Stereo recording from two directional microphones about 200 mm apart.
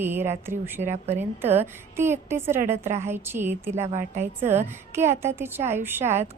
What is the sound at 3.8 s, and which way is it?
Speech, 35° right (ahead or behind).